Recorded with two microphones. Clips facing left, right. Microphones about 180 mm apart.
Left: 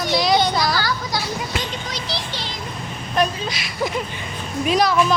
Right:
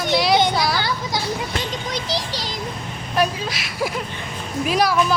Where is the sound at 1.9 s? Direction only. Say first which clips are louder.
Right 3 dB; 40° right (ahead or behind).